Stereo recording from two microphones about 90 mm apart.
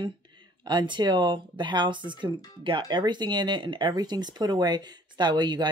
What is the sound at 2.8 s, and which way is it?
Speech, 55° right (ahead or behind).